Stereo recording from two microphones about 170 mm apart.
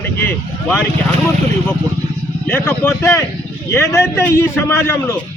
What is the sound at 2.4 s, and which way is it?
Speech, 10° left (ahead or behind).